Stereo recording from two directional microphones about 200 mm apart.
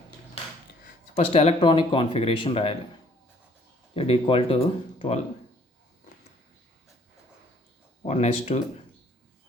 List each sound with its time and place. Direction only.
1.1 s speech: 30° left (ahead or behind)
3.9 s speech: 30° left (ahead or behind)
8.0 s speech: 35° left (ahead or behind)